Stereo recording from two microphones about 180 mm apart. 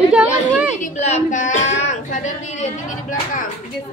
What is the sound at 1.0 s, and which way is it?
Speech, 40° left (ahead or behind).